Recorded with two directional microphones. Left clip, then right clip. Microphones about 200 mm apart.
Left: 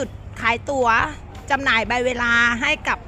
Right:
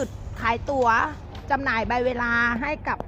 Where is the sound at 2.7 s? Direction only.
25° left (ahead or behind).